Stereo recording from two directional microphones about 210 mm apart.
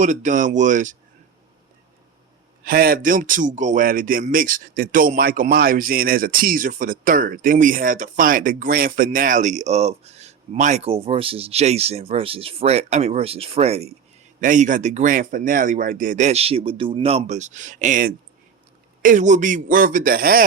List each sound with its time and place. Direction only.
0.0 s speech: 35° right (ahead or behind)
2.6 s speech: 45° right (ahead or behind)